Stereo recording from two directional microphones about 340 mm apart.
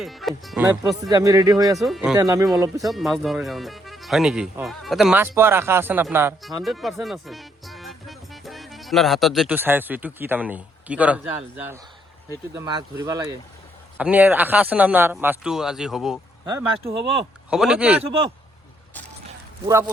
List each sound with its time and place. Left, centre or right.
0.0 s speech: centre
17.5 s speech: centre
18.0 s speech: centre